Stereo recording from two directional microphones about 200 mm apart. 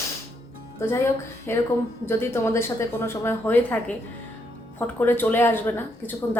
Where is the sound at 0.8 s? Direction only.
15° left (ahead or behind).